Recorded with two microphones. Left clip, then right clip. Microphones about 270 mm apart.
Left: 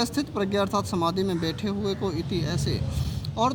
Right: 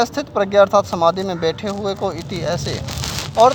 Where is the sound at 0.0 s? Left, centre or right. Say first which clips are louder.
Right 9 dB; centre.